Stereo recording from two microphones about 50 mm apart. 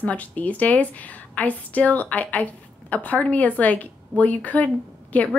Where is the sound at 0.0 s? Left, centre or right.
Left.